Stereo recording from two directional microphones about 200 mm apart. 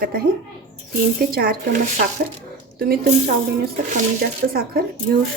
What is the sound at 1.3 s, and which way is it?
Speech, 50° right (ahead or behind).